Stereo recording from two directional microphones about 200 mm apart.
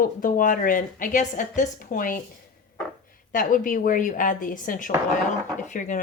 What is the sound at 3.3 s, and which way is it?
A woman's voice, 40° left (ahead or behind).